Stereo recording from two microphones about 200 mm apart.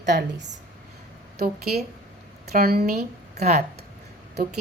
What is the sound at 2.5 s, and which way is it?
Speech, 50° right (ahead or behind).